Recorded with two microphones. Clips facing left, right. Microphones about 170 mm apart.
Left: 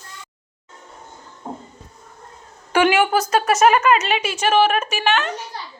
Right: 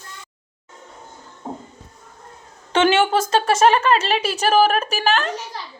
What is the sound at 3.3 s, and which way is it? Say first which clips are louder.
Speech: left 1 dB; 25° right (ahead or behind).